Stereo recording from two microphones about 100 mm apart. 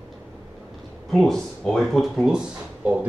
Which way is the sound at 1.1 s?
5° left (ahead or behind).